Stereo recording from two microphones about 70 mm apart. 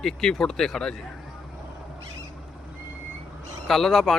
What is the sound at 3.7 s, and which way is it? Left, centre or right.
Speech, centre.